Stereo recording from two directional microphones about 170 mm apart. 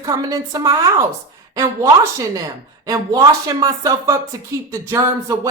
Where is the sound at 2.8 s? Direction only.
20° right (ahead or behind).